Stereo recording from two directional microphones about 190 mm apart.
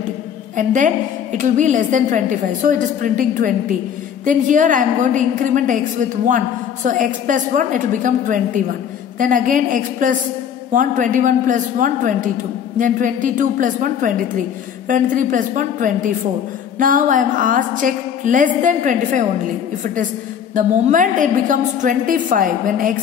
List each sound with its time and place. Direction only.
0.6 s a woman's voice: 45° right (ahead or behind)
20.5 s a woman's voice: 45° right (ahead or behind)